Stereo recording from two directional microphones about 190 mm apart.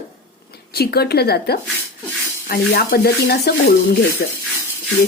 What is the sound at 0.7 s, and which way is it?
Speech, 55° left (ahead or behind).